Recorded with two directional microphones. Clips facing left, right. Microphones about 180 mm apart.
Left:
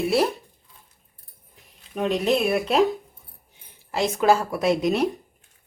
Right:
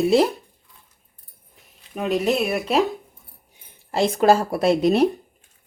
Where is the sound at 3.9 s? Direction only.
35° right (ahead or behind).